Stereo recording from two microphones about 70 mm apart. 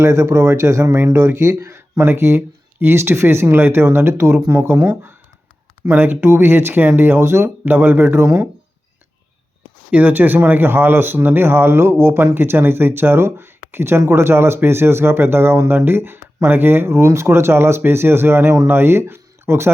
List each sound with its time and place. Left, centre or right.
0.0 s speech: right
9.9 s speech: right